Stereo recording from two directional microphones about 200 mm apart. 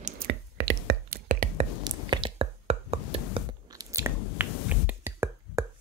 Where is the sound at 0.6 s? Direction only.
60° right (ahead or behind).